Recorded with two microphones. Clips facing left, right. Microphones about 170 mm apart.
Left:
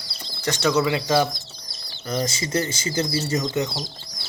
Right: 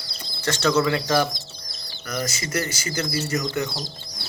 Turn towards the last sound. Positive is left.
turn(degrees=30)  # may be behind; listen again after turning